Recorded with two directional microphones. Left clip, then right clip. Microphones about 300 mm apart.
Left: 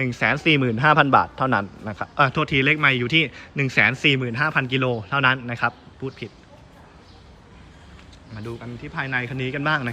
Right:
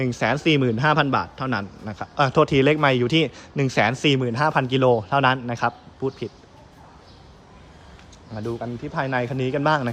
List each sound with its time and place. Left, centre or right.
0.0 s a man's voice: centre
8.4 s a man's voice: centre